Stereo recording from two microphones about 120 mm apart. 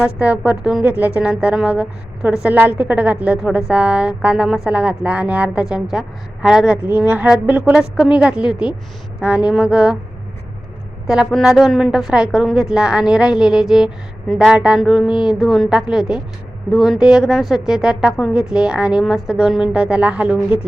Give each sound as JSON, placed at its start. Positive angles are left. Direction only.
{"t": 0.0, "sound": "speech", "side_deg": -10}
{"t": 11.0, "sound": "a woman's voice", "side_deg": -5}